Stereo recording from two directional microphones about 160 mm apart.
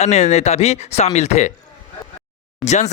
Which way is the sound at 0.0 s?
45° left (ahead or behind).